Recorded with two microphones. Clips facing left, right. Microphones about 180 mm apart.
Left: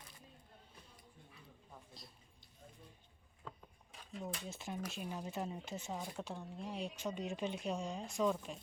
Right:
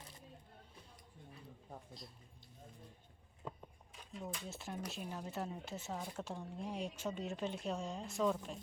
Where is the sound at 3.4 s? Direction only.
20° right (ahead or behind).